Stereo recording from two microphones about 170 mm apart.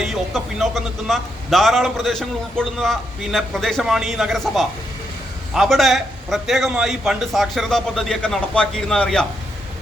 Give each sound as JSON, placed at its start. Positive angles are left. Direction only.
{"t": 0.0, "sound": "a man's voice", "side_deg": 0}